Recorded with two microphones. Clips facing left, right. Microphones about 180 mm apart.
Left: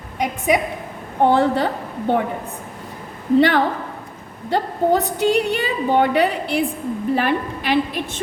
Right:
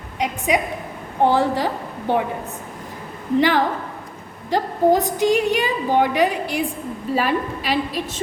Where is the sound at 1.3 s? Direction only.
60° left (ahead or behind).